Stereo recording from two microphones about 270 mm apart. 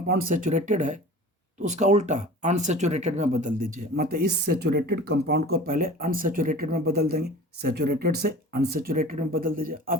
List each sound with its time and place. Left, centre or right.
0.3 s speech: right